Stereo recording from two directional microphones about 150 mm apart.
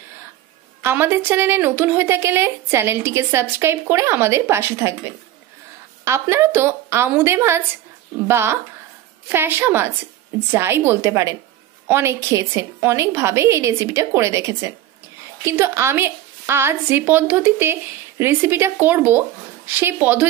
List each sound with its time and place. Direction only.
0.8 s speech: 15° right (ahead or behind)